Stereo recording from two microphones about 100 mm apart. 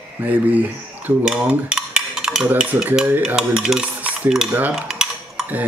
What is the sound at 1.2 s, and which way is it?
Stir, 10° right (ahead or behind).